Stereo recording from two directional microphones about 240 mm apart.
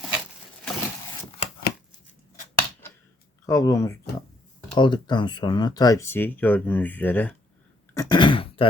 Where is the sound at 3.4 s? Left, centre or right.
Centre.